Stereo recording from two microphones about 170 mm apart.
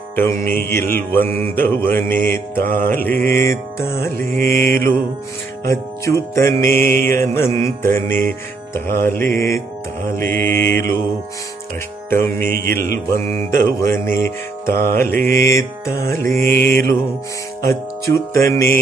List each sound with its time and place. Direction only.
0.1 s mantra: 15° left (ahead or behind)
4.2 s mantra: 55° right (ahead or behind)
6.0 s mantra: 15° left (ahead or behind)
12.1 s mantra: 15° left (ahead or behind)
16.4 s mantra: 55° right (ahead or behind)
18.1 s mantra: 15° left (ahead or behind)